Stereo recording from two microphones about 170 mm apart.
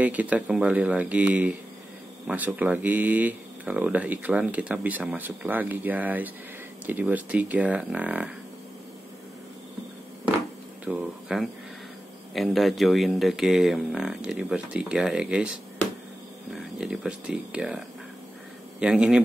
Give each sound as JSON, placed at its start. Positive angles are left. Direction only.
{"t": 0.0, "sound": "speech", "side_deg": -10}
{"t": 10.9, "sound": "speech", "side_deg": -5}
{"t": 16.5, "sound": "speech", "side_deg": 0}